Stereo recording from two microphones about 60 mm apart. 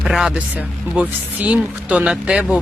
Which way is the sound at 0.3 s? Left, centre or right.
Right.